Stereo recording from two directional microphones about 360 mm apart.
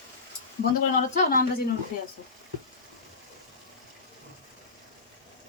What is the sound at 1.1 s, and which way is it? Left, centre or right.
Speech, left.